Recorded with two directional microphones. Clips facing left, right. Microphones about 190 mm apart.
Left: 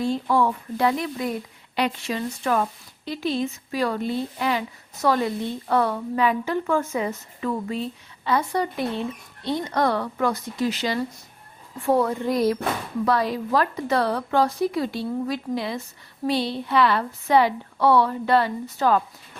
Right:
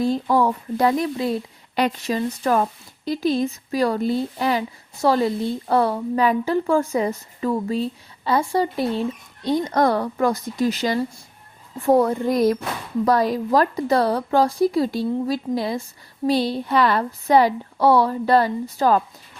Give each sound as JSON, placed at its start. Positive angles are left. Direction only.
{"t": 0.0, "sound": "a woman's voice", "side_deg": -40}